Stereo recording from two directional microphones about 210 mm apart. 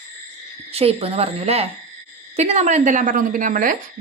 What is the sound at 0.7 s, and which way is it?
A woman's voice, 30° right (ahead or behind).